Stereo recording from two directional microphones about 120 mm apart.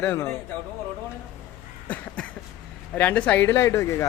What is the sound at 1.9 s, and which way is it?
Cough, 10° left (ahead or behind).